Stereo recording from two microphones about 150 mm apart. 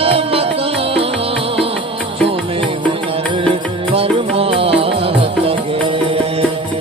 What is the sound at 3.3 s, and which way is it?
Music, 40° right (ahead or behind).